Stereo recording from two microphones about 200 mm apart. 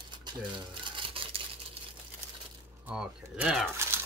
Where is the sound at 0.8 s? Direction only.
25° right (ahead or behind).